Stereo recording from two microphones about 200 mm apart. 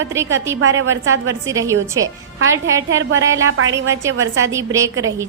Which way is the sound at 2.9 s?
80° right.